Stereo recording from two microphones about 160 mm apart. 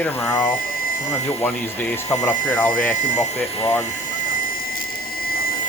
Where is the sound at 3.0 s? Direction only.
50° left (ahead or behind).